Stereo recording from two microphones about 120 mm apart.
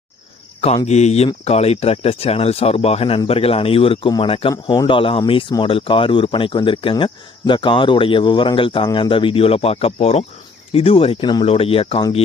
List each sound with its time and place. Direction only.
0.9 s speech: 70° left (ahead or behind); by 11.4 s 40° left (ahead or behind)
11.4 s speech: 55° left (ahead or behind)